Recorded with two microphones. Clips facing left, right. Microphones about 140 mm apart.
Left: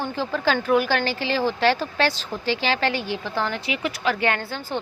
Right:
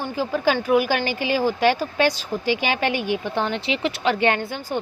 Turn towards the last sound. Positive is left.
turn(degrees=-15)  # may be behind; listen again after turning